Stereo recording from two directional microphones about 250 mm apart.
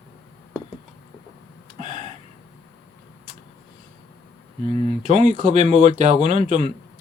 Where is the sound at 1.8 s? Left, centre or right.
Right.